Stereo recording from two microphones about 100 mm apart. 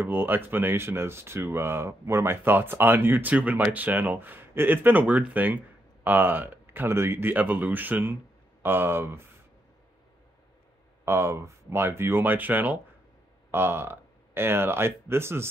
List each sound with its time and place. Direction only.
0.0 s speech: 20° right (ahead or behind)
11.1 s speech: 25° right (ahead or behind)